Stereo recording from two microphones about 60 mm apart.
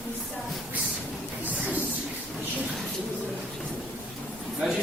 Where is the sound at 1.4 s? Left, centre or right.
Right.